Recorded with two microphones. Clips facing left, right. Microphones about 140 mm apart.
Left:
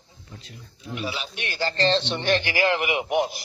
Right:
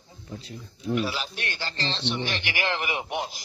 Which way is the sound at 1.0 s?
40° right (ahead or behind).